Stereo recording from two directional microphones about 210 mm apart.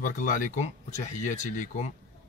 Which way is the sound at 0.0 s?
40° left (ahead or behind).